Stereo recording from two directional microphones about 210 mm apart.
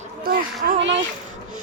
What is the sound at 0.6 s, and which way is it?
Speech, 50° right (ahead or behind).